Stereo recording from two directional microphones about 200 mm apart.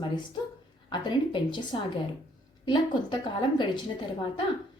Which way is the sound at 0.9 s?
25° left (ahead or behind).